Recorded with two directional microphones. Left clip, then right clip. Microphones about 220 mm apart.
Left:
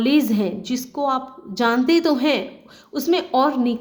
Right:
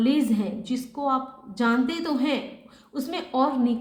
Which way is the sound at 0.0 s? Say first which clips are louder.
Left 5 dB; 45° left (ahead or behind).